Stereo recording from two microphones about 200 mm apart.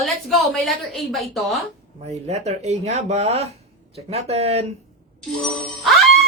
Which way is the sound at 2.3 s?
35° right (ahead or behind).